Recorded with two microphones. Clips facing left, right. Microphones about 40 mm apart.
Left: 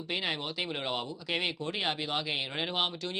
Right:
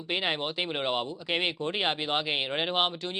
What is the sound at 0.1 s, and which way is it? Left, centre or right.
Speech, right.